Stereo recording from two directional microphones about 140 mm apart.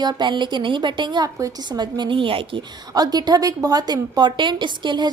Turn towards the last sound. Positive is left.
turn(degrees=-35)  # may be behind; listen again after turning